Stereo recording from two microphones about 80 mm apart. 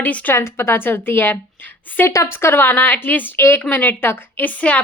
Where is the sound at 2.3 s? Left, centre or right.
Left.